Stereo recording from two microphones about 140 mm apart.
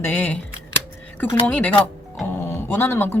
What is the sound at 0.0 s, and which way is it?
Speech, 15° left (ahead or behind).